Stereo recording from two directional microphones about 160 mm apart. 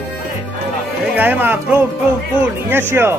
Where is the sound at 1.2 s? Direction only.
10° right (ahead or behind).